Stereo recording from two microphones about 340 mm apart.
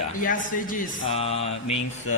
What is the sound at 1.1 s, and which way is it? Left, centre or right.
Mantra, centre.